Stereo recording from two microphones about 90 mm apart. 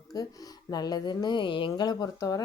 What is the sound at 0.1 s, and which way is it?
Speech, 45° left (ahead or behind).